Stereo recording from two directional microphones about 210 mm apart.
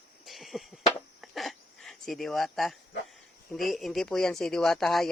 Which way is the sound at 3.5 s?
Centre (ahead or behind).